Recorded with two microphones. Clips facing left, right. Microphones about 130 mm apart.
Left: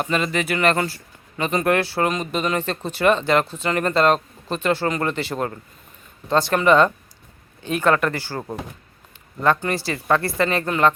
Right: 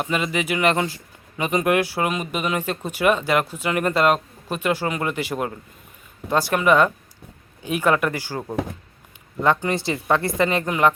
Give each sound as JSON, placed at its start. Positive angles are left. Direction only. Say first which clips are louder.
{"t": 0.0, "sound": "speech", "louder": "left 1 dB", "side_deg": -10}
{"t": 9.4, "sound": "speech", "louder": "even", "side_deg": -20}